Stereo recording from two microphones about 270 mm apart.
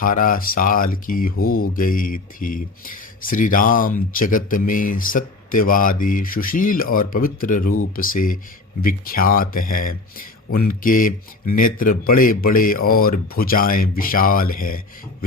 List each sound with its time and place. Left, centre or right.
0.0 s speech: left